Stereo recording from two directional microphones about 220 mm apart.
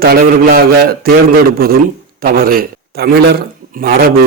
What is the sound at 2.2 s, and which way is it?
A man's voice, 40° right (ahead or behind).